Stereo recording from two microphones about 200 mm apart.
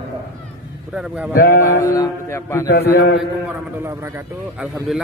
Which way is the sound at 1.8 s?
15° left (ahead or behind).